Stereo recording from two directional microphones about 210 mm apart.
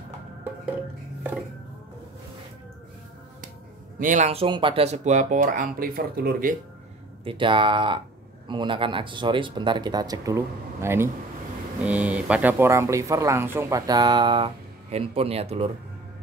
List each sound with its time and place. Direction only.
4.0 s speech: 35° right (ahead or behind)
7.2 s speech: 25° right (ahead or behind)